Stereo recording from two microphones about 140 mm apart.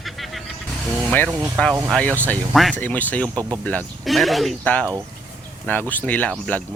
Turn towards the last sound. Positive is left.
turn(degrees=10)  # may be behind; listen again after turning